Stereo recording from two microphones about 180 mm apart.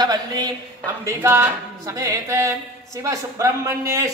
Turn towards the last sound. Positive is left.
turn(degrees=-20)  # may be behind; listen again after turning